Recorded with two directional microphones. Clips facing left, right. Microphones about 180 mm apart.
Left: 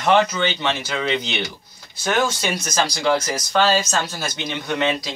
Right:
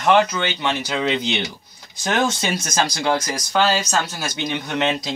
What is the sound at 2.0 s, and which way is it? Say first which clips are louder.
Speech: even; 20° right (ahead or behind).